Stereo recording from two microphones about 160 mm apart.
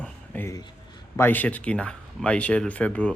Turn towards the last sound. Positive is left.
turn(degrees=10)  # may be behind; listen again after turning